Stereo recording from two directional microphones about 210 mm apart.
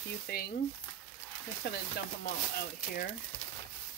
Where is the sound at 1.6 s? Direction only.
50° left (ahead or behind).